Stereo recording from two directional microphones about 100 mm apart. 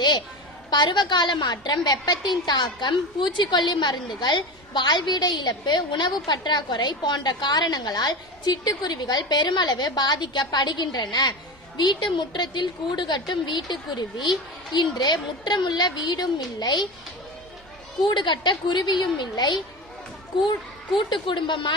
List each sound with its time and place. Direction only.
0.7 s a woman's voice: 45° left (ahead or behind)
18.0 s a woman's voice: 55° left (ahead or behind)